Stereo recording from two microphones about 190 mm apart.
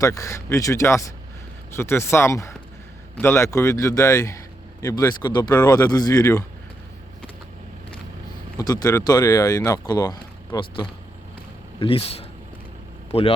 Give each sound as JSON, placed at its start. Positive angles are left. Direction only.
{"t": 0.0, "sound": "a man's voice", "side_deg": 15}
{"t": 8.5, "sound": "speech", "side_deg": 20}